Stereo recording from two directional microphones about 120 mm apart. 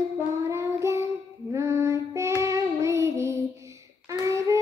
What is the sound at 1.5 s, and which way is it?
Female singing, 25° right (ahead or behind).